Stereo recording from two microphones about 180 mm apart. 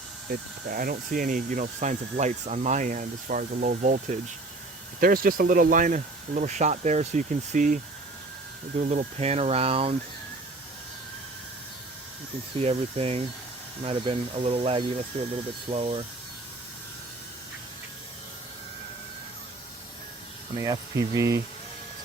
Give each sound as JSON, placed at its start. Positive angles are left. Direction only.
{"t": 0.3, "sound": "speech", "side_deg": -50}
{"t": 8.8, "sound": "speech", "side_deg": -40}
{"t": 12.5, "sound": "speech", "side_deg": -35}
{"t": 20.6, "sound": "speech", "side_deg": -20}